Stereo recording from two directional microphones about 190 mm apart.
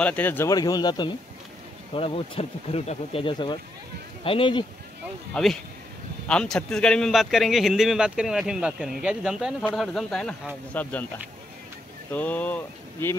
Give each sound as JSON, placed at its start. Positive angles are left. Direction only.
{"t": 0.0, "sound": "speech", "side_deg": 10}
{"t": 5.3, "sound": "a man's voice", "side_deg": 0}
{"t": 12.1, "sound": "speech", "side_deg": 10}